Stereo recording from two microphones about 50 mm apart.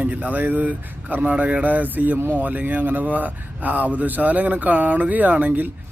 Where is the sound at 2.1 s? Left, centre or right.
Right.